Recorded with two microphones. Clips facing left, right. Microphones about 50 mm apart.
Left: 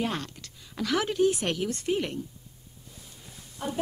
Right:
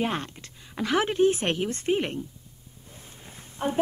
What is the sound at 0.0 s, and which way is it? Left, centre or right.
Speech, right.